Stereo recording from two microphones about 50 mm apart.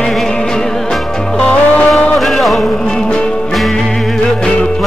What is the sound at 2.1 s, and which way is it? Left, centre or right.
Music, centre.